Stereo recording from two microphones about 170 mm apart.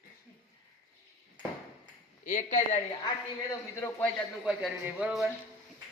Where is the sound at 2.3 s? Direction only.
50° left (ahead or behind).